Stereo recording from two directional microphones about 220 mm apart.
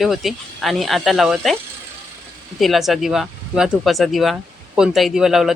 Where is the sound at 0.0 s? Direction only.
Centre (ahead or behind).